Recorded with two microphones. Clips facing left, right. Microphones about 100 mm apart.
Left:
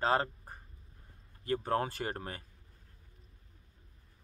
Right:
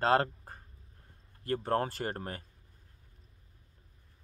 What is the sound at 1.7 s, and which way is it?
Speech, 35° right (ahead or behind).